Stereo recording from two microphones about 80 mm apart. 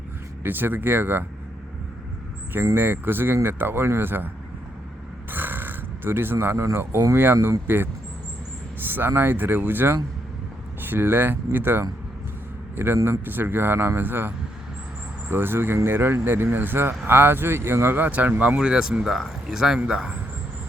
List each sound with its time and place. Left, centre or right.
0.4 s speech: right
2.7 s speech: right
5.3 s a sound: right
6.7 s speech: right
8.9 s a man's voice: right
18.6 s speech: centre